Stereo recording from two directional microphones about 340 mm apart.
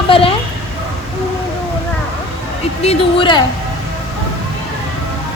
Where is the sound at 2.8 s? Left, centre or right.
Centre.